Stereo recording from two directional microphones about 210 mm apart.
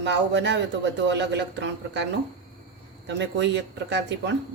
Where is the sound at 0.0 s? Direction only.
55° right (ahead or behind).